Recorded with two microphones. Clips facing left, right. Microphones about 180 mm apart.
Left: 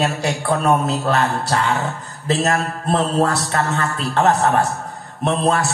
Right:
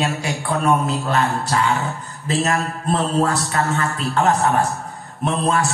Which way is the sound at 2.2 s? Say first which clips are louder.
Left 2 dB; 35° left (ahead or behind).